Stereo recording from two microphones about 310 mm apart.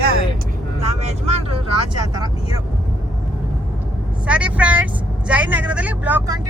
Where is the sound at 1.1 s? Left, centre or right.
Centre.